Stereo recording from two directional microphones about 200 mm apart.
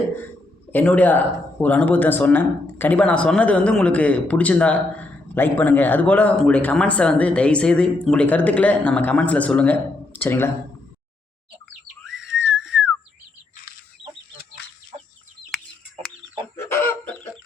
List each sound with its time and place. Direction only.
0.7 s speech: 5° left (ahead or behind)
12.0 s whistle: centre (ahead or behind)
16.6 s chicken: 10° left (ahead or behind)